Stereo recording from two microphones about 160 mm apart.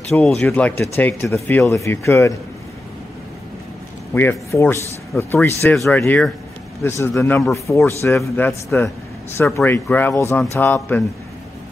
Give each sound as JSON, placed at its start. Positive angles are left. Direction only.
{"t": 0.2, "sound": "speech", "side_deg": 5}
{"t": 4.1, "sound": "speech", "side_deg": 15}